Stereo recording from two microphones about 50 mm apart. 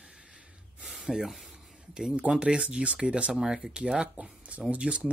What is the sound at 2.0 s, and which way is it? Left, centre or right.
Speech, centre.